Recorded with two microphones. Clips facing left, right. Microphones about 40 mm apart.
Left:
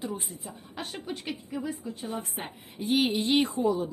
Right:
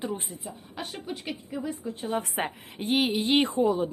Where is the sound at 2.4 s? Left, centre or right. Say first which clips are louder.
Right 8 dB; right.